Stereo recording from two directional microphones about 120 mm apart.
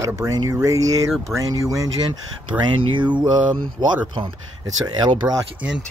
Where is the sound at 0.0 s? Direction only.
30° right (ahead or behind).